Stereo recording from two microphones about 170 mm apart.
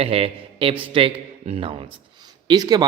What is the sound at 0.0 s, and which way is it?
A man's voice, 35° right (ahead or behind).